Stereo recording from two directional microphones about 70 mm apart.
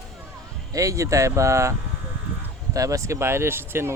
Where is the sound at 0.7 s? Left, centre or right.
Right.